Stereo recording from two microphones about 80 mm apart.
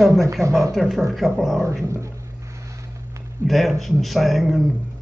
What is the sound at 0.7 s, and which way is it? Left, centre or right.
Speech, centre.